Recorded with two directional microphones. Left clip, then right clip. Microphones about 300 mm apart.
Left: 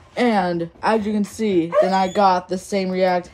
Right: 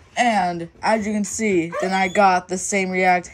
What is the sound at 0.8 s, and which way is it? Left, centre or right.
Speech, centre.